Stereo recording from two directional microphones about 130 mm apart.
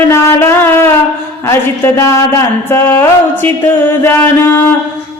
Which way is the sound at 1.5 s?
20° left (ahead or behind).